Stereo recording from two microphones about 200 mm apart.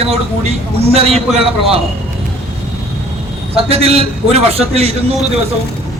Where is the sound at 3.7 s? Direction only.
30° right (ahead or behind).